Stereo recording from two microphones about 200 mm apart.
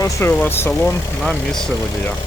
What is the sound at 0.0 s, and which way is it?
Speech, 15° left (ahead or behind).